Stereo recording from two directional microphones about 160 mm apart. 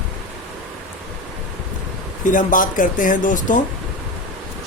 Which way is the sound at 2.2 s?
55° left (ahead or behind).